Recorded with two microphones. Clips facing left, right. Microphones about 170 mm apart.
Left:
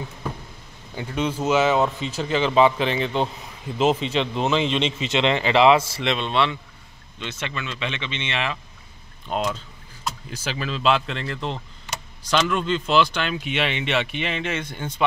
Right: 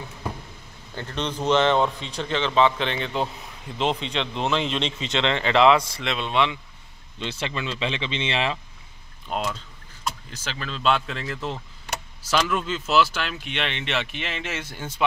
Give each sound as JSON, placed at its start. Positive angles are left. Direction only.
{"t": 0.9, "sound": "speech", "side_deg": 10}
{"t": 7.2, "sound": "speech", "side_deg": -30}
{"t": 9.3, "sound": "speech", "side_deg": 0}
{"t": 10.0, "sound": "speech", "side_deg": 10}